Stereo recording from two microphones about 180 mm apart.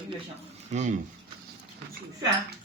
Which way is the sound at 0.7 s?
40° right (ahead or behind).